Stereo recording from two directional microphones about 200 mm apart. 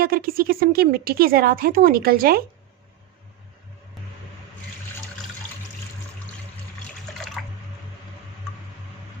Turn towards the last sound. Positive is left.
turn(degrees=-5)  # may be behind; listen again after turning